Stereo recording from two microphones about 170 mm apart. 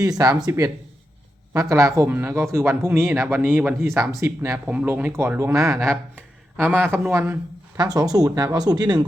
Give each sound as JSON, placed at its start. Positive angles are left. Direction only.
{"t": 0.0, "sound": "speech", "side_deg": -20}
{"t": 1.7, "sound": "speech", "side_deg": -20}